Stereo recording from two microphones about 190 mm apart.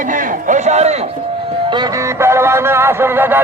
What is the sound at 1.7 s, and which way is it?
Music, 20° right (ahead or behind).